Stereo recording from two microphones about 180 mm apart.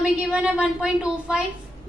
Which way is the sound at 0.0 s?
5° right (ahead or behind).